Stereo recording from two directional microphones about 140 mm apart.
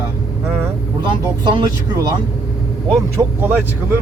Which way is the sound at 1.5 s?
30° right (ahead or behind).